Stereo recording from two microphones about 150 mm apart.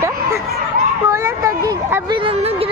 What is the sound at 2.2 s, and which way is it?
Speech, 40° right (ahead or behind).